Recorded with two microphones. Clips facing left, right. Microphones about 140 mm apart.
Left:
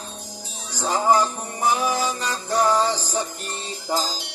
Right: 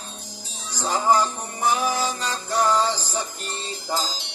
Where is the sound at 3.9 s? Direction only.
10° left (ahead or behind).